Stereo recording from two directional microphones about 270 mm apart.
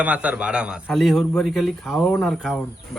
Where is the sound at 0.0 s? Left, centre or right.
Centre.